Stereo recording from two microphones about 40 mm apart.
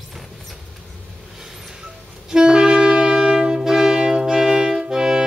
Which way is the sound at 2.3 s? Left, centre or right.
Centre.